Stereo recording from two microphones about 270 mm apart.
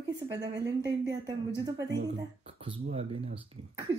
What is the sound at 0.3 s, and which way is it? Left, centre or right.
Speech, centre.